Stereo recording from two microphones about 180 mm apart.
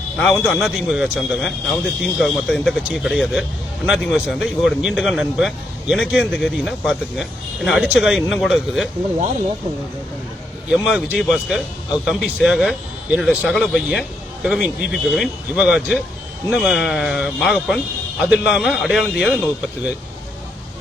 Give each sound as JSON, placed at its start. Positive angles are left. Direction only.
{"t": 0.2, "sound": "speech", "side_deg": 0}
{"t": 10.7, "sound": "speech", "side_deg": -5}